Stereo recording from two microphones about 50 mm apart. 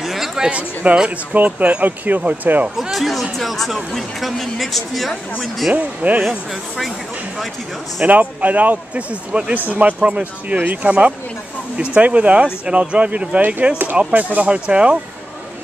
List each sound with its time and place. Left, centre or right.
0.0 s a sound: centre
0.5 s a man's voice: right
2.8 s speech: centre
5.7 s speech: right
8.0 s a man's voice: right